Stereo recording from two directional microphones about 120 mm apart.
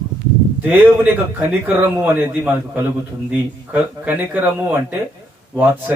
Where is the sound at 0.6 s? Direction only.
15° right (ahead or behind).